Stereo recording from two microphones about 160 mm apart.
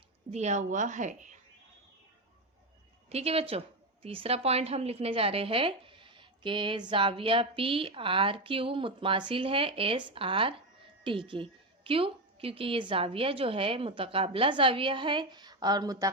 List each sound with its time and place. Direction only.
0.3 s a woman's voice: 45° right (ahead or behind)
3.1 s a woman's voice: 40° right (ahead or behind); by 16.0 s 25° right (ahead or behind)